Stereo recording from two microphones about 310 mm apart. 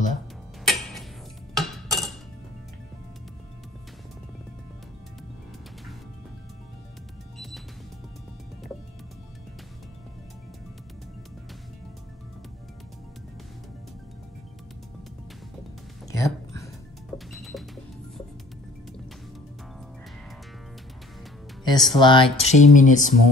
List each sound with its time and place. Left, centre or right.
0.7 s music: centre
1.5 s cutlery: centre
16.1 s a sound: centre
17.3 s music: centre
21.6 s speech: centre